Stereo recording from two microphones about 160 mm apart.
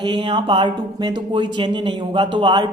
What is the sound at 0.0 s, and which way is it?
Speech, 30° right (ahead or behind).